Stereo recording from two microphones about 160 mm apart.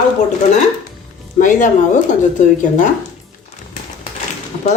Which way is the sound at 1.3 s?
55° left (ahead or behind).